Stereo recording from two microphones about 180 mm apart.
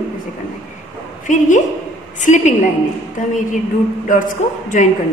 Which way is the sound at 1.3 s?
45° left (ahead or behind).